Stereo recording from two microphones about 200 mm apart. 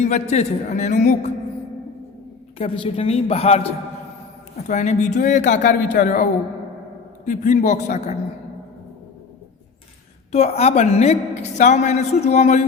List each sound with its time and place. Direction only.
0.0 s a woman's voice: 35° left (ahead or behind)
2.6 s a woman's voice: 25° left (ahead or behind)
4.7 s a woman's voice: 35° left (ahead or behind)
7.3 s a woman's voice: 40° left (ahead or behind)
10.3 s a woman's voice: 30° left (ahead or behind)